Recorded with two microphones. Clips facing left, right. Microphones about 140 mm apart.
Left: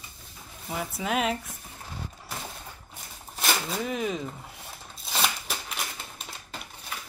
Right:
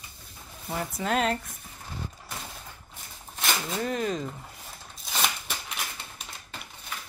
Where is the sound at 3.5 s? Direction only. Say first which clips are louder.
Even; 5° left (ahead or behind).